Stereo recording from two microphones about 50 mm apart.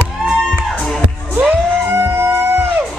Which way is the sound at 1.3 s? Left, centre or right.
Right.